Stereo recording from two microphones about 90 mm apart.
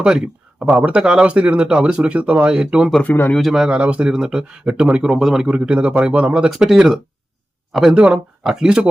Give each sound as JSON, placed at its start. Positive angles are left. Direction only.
{"t": 0.0, "sound": "speech", "side_deg": -10}
{"t": 3.0, "sound": "speech", "side_deg": 20}
{"t": 3.3, "sound": "speech", "side_deg": 0}